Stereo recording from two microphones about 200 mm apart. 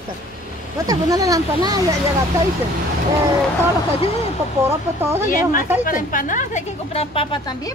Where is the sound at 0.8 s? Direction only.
15° right (ahead or behind).